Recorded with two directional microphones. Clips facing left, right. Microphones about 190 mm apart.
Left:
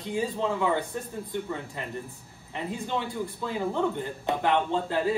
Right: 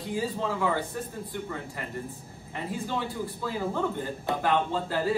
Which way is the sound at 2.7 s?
20° left (ahead or behind).